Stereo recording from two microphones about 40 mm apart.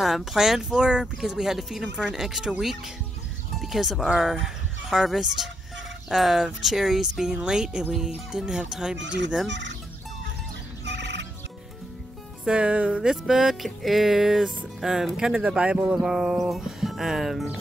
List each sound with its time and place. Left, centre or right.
0.0 s speech: centre
0.7 s speech: centre
3.6 s speech: centre
12.4 s speech: right
13.0 s speech: centre
14.8 s speech: centre
15.4 s speech: right
16.8 s music: centre